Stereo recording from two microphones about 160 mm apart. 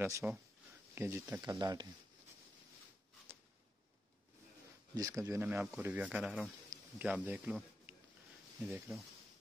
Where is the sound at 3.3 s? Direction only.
10° right (ahead or behind).